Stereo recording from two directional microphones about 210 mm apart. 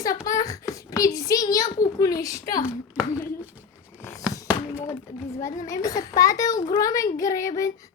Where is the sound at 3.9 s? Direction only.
15° left (ahead or behind).